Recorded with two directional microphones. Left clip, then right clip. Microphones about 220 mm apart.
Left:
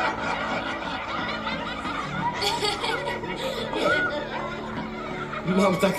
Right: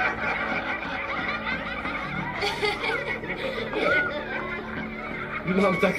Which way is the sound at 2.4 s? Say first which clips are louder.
Right 1 dB; 30° left (ahead or behind).